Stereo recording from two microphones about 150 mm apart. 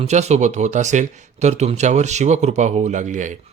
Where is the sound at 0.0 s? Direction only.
50° right (ahead or behind).